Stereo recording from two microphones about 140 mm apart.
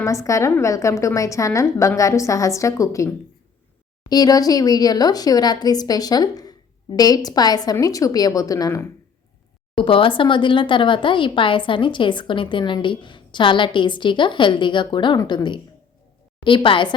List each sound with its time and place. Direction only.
0.0 s speech: 20° left (ahead or behind)
4.1 s speech: 25° left (ahead or behind)
9.7 s speech: 40° left (ahead or behind)